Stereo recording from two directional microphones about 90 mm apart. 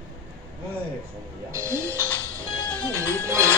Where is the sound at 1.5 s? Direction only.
30° right (ahead or behind).